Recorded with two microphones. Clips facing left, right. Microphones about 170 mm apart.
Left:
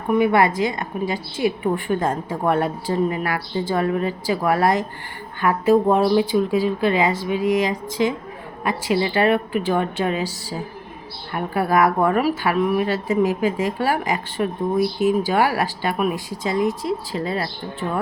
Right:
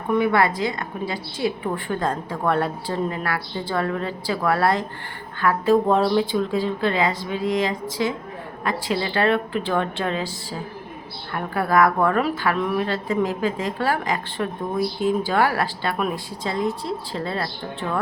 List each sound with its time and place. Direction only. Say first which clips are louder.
0.1 s a woman's voice: left 2 dB; 15° left (ahead or behind)
11.3 s a woman's voice: left 1 dB; 10° left (ahead or behind)